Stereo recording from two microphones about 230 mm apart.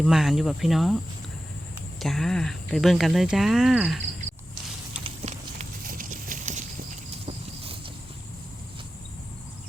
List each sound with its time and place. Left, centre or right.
0.0 s speech: centre
2.0 s speech: centre
5.0 s clip-clop: right